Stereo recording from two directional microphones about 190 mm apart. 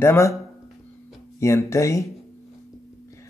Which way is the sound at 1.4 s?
15° left (ahead or behind).